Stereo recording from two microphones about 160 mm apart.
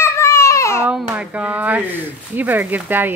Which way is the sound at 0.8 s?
5° right (ahead or behind).